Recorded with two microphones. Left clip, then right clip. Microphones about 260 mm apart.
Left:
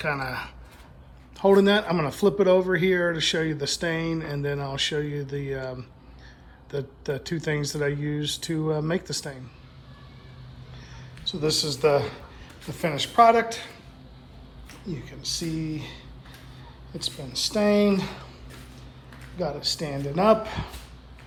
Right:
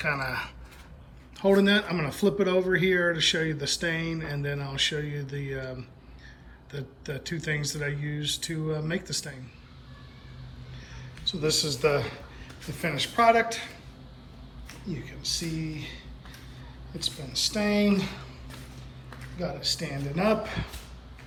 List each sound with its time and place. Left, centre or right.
0.0 s speech: centre
11.3 s speech: centre
14.8 s speech: centre
17.0 s speech: centre
19.4 s speech: centre